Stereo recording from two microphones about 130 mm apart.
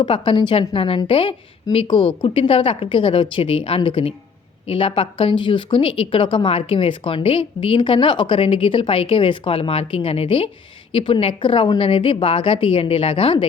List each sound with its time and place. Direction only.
0.0 s a woman's voice: 40° left (ahead or behind)